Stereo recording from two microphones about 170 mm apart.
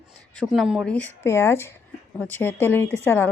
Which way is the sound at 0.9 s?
10° left (ahead or behind).